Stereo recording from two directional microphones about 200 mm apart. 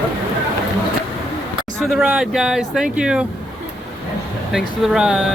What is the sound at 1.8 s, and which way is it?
Speech, centre (ahead or behind).